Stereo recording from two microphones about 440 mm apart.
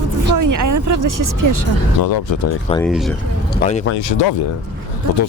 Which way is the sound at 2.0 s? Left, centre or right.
Left.